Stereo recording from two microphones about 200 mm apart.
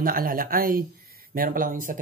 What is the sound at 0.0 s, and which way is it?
Speech, 45° right (ahead or behind).